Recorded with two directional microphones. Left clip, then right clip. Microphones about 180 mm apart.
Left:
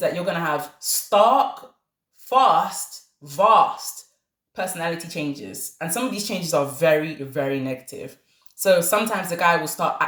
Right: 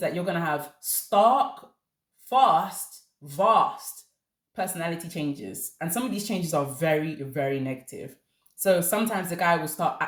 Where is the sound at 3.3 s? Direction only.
20° right (ahead or behind).